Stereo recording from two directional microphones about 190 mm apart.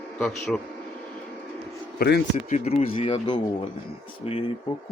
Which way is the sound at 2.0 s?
55° left (ahead or behind).